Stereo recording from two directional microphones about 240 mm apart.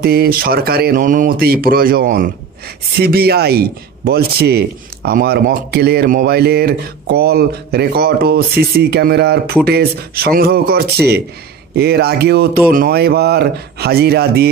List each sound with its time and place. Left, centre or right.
0.0 s a man's voice: right